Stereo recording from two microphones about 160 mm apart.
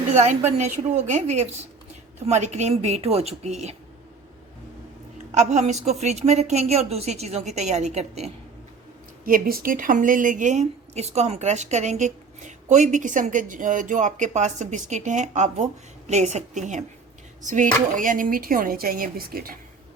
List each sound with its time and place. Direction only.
0.1 s a woman's voice: 45° right (ahead or behind)
5.1 s a woman's voice: 45° right (ahead or behind)
9.2 s a woman's voice: 60° right (ahead or behind)